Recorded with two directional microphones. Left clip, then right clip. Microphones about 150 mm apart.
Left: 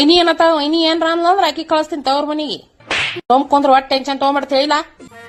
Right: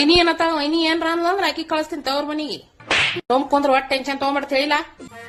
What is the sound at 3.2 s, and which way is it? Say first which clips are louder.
Speech: left 10 dB; 25° left (ahead or behind).